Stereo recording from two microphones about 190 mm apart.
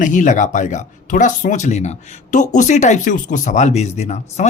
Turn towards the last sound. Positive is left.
turn(degrees=35)  # may be behind; listen again after turning